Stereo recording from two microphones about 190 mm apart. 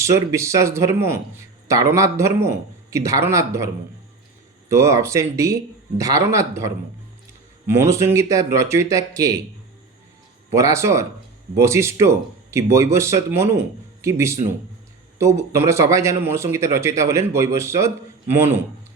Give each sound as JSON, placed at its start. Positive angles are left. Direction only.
{"t": 0.0, "sound": "a man's voice", "side_deg": -15}
{"t": 4.7, "sound": "a man's voice", "side_deg": -15}
{"t": 10.5, "sound": "a man's voice", "side_deg": -15}